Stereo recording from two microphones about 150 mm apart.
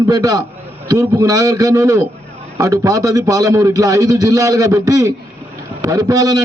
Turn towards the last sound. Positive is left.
turn(degrees=-25)  # may be behind; listen again after turning